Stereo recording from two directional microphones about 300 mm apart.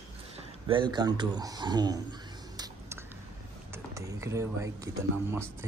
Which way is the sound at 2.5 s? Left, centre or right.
Centre.